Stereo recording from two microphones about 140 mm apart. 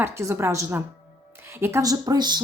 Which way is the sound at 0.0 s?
20° right (ahead or behind).